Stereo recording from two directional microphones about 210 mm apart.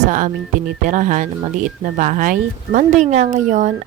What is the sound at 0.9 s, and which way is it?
A woman's voice, 35° right (ahead or behind).